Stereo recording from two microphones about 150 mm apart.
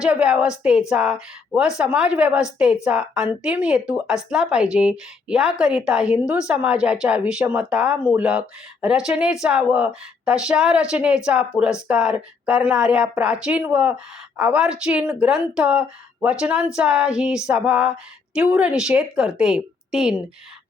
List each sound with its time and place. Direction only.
0.0 s a woman's voice: 5° right (ahead or behind)